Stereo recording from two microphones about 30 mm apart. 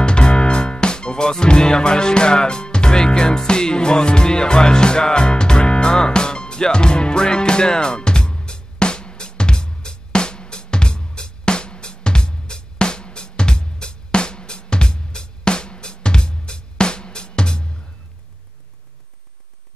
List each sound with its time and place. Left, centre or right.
0.0 s music: left